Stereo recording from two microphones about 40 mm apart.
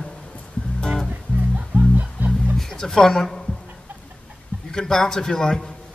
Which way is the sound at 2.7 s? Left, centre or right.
Centre.